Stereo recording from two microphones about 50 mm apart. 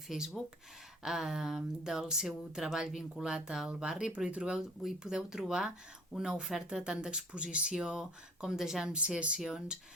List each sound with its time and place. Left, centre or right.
0.1 s speech: centre
4.5 s speech: centre
8.9 s speech: right
9.4 s speech: centre